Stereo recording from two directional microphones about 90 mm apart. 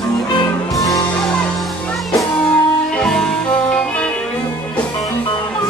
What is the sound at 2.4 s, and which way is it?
Music, 10° left (ahead or behind).